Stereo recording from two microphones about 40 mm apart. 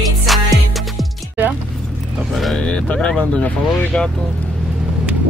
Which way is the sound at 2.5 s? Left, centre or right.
Left.